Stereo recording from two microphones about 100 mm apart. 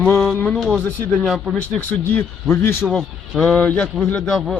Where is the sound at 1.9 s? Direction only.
20° left (ahead or behind).